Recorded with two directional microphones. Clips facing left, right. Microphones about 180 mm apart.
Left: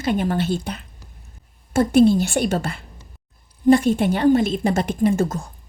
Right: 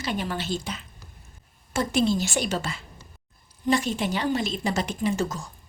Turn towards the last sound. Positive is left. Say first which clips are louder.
# left 7 dB
turn(degrees=50)  # may be behind; listen again after turning